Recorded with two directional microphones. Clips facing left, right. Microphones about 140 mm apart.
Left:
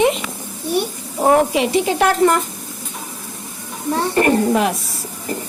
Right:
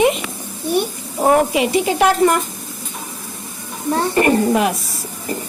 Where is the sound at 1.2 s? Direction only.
5° right (ahead or behind).